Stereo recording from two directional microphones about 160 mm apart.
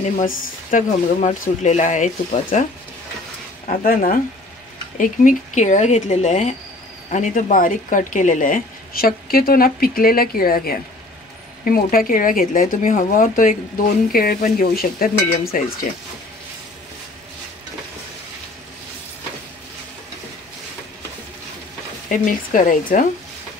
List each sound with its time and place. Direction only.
0.2 s speech: 55° left (ahead or behind)
3.6 s speech: 60° left (ahead or behind)
14.1 s speech: 70° left (ahead or behind)
22.1 s speech: 55° left (ahead or behind)